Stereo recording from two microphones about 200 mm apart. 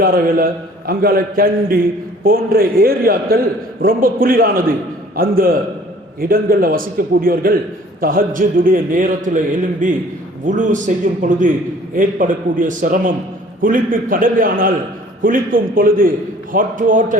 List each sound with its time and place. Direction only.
0.0 s a man's voice: 45° right (ahead or behind)